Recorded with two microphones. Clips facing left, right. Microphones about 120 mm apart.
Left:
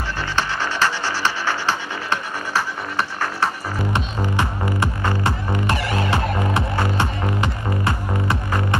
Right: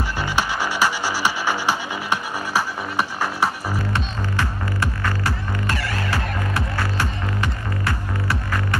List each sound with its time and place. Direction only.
0.2 s music: 10° right (ahead or behind)
3.9 s music: 20° left (ahead or behind)